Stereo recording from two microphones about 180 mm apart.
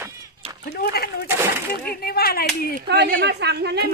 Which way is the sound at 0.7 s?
60° left (ahead or behind).